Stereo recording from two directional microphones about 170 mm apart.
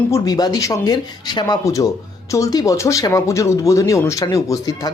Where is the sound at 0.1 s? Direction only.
20° left (ahead or behind).